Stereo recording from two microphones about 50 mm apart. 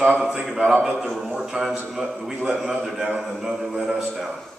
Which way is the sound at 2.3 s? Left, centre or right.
Right.